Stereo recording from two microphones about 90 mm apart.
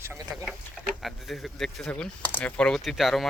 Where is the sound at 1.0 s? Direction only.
Centre (ahead or behind).